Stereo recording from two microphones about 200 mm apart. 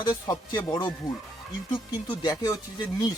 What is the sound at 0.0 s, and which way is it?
Speech, 20° left (ahead or behind).